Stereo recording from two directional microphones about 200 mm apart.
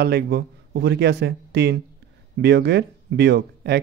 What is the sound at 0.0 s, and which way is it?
Speech, 55° right (ahead or behind).